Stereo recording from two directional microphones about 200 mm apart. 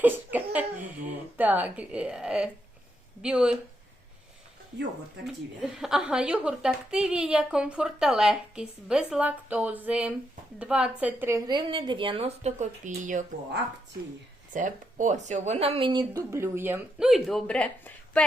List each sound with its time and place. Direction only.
0.0 s laughter: 10° right (ahead or behind)
1.4 s a woman's voice: 10° right (ahead or behind)
5.8 s a woman's voice: 5° right (ahead or behind); by 13.2 s 40° right (ahead or behind)
14.5 s speech: 40° right (ahead or behind); by 18.2 s 5° left (ahead or behind)